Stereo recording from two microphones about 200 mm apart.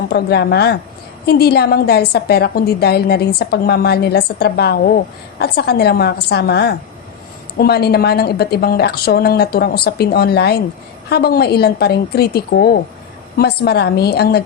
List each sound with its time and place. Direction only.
0.1 s a woman's voice: 55° left (ahead or behind)